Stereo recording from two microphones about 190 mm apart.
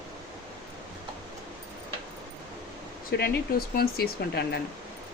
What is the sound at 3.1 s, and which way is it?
Speech, 60° left (ahead or behind).